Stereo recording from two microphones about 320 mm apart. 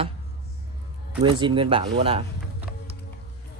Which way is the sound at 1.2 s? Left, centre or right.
Centre.